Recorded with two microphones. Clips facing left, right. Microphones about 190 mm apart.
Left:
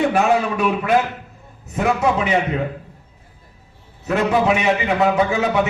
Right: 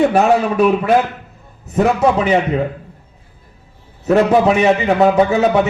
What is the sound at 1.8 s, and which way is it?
Speech, 35° right (ahead or behind).